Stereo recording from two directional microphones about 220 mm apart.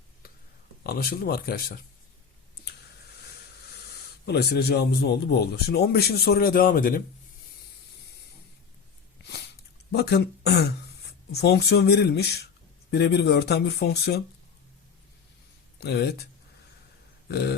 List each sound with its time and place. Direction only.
0.9 s speech: 45° left (ahead or behind)
4.3 s speech: 45° left (ahead or behind)
9.9 s speech: 45° left (ahead or behind)
15.8 s speech: 50° left (ahead or behind)